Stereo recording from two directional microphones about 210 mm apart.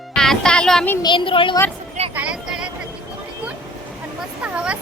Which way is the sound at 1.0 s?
20° left (ahead or behind).